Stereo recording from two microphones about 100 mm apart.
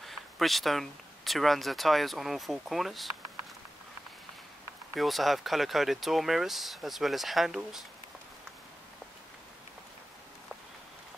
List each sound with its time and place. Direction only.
0.0 s speech: centre (ahead or behind)
4.9 s speech: centre (ahead or behind)